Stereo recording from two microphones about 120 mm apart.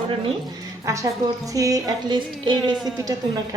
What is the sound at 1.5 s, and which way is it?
Music, 30° right (ahead or behind).